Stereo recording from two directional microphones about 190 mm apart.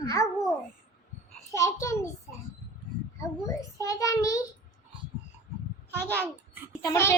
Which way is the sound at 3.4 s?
15° left (ahead or behind).